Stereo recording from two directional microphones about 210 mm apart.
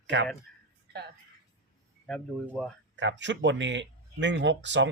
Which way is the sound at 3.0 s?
60° right (ahead or behind).